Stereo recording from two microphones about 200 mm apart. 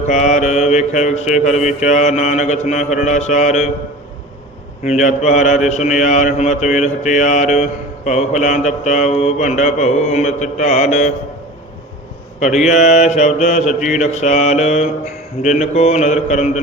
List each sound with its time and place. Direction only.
0.1 s mantra: 35° left (ahead or behind)
4.9 s mantra: 35° left (ahead or behind)
12.6 s mantra: 35° left (ahead or behind)